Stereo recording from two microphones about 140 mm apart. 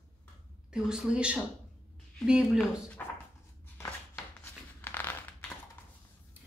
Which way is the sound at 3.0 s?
15° left (ahead or behind).